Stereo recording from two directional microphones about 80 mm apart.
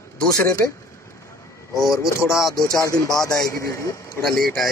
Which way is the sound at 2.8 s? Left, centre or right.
Left.